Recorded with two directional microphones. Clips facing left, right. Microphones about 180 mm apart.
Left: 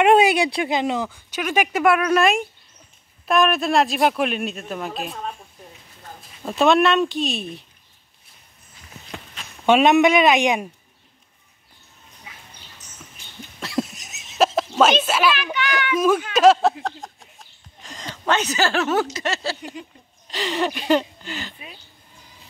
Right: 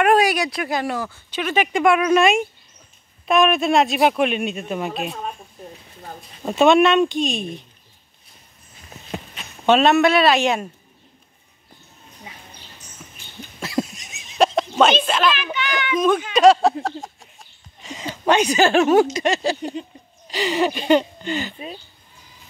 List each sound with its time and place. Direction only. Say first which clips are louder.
0.0 s a man's voice: left 2 dB; 25° left (ahead or behind); by 5.3 s centre (ahead or behind)
6.5 s a man's voice: right 3 dB; centre (ahead or behind)
9.7 s speech: even; 15° left (ahead or behind)
13.6 s a sound: right 1 dB; centre (ahead or behind)
14.8 s a man's voice: even; 5° left (ahead or behind); by 19.6 s 15° right (ahead or behind)
19.6 s a sound: right 7 dB; 30° right (ahead or behind)
20.2 s a man's voice: right 3 dB; centre (ahead or behind)